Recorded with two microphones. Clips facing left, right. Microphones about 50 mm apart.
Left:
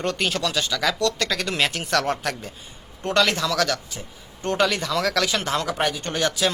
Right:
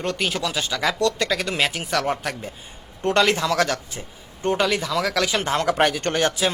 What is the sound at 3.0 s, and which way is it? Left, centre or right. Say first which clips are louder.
Speech: right 2 dB; right.